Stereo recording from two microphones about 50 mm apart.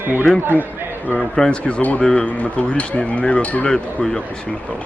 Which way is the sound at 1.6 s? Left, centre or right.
Left.